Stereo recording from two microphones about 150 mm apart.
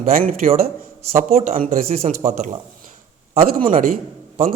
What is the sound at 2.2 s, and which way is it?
Speech, 40° right (ahead or behind).